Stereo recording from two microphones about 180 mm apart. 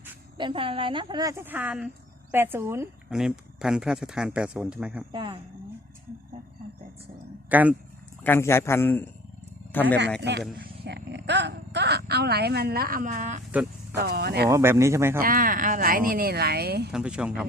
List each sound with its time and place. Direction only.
0.3 s speech: 30° right (ahead or behind)
3.1 s speech: 5° right (ahead or behind)
5.1 s speech: 25° right (ahead or behind)
7.5 s speech: 10° right (ahead or behind)
8.2 s a man's voice: 10° left (ahead or behind)
10.2 s speech: 70° right (ahead or behind); by 13.4 s 45° right (ahead or behind)
13.9 s speech: 65° right (ahead or behind)
14.5 s speech: 15° right (ahead or behind)
15.2 s speech: 50° right (ahead or behind)
16.9 s speech: 5° right (ahead or behind)